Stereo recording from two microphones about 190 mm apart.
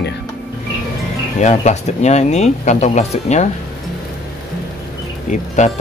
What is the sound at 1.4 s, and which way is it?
Speech, 40° left (ahead or behind).